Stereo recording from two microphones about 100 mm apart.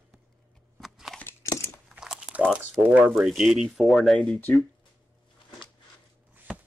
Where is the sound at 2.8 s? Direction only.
15° right (ahead or behind).